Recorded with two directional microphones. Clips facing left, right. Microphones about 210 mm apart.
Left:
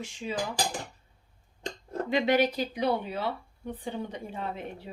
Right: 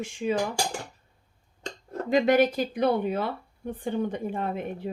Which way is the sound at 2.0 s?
45° right (ahead or behind).